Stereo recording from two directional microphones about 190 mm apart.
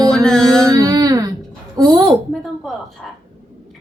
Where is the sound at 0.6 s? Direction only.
15° right (ahead or behind).